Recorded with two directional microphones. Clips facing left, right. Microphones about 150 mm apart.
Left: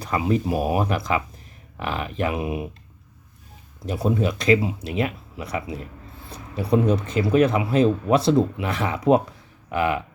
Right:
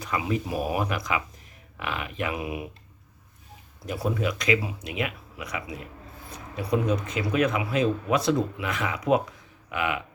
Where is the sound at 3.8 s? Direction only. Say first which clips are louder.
Left 5 dB; 25° left (ahead or behind).